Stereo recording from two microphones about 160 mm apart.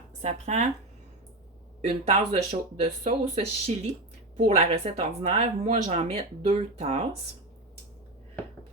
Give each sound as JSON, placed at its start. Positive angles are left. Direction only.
{"t": 0.2, "sound": "speech", "side_deg": -45}
{"t": 1.9, "sound": "speech", "side_deg": -40}